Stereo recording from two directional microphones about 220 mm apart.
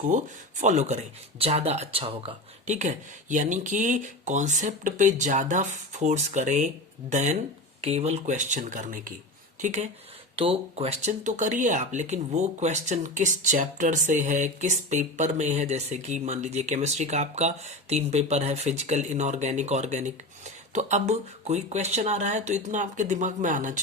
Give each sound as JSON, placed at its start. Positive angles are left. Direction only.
{"t": 0.1, "sound": "speech", "side_deg": -35}